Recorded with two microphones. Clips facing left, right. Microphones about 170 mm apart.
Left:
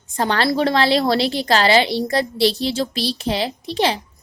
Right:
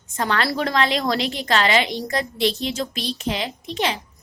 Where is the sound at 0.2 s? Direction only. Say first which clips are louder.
Left 4 dB; 30° left (ahead or behind).